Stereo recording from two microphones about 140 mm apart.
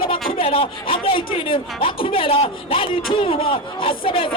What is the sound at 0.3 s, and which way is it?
Speech, 40° left (ahead or behind).